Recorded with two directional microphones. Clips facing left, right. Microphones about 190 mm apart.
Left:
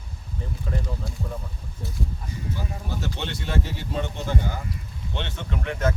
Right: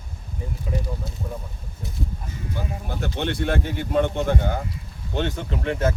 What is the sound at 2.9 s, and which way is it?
Speech, 55° right (ahead or behind).